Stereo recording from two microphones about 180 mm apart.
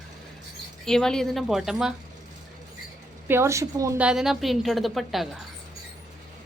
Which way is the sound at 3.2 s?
15° right (ahead or behind).